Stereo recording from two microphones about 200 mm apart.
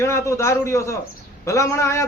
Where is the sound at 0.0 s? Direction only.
15° left (ahead or behind).